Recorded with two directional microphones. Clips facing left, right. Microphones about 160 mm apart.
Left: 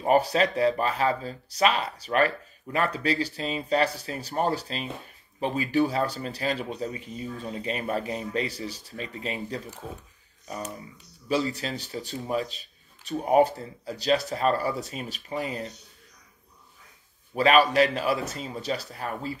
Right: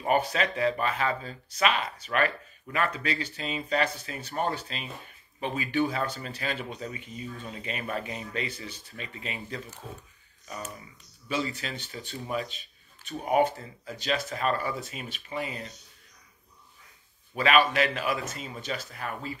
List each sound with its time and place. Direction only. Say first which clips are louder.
0.0 s speech: left 4 dB; 35° left (ahead or behind)
11.2 s speech: left 5 dB; 35° left (ahead or behind)
17.3 s speech: left 3 dB; 35° left (ahead or behind)